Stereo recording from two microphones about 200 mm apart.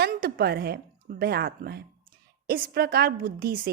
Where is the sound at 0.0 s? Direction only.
50° right (ahead or behind).